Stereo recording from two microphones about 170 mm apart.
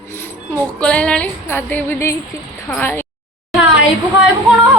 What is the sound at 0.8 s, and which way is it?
Music, 5° left (ahead or behind).